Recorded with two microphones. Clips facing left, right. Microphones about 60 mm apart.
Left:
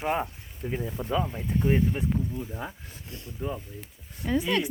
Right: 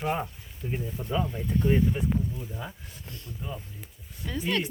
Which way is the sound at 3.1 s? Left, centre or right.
Centre.